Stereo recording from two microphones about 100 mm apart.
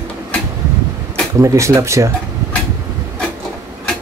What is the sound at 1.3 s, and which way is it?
Speech, 30° right (ahead or behind).